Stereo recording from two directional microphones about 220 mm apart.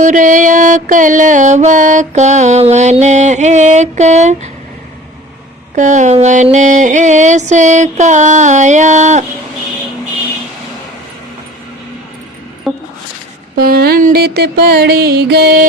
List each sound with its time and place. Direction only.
0.0 s music: 35° right (ahead or behind)
5.7 s music: 35° right (ahead or behind)
13.6 s music: 45° right (ahead or behind)